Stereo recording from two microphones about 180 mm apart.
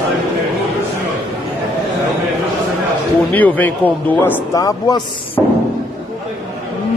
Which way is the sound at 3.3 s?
10° left (ahead or behind).